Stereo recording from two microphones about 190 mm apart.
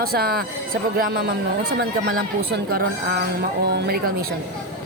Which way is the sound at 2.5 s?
55° right (ahead or behind).